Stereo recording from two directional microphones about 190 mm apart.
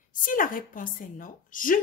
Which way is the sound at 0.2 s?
45° left (ahead or behind).